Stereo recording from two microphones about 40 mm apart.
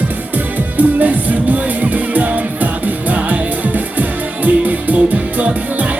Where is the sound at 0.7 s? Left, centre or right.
Right.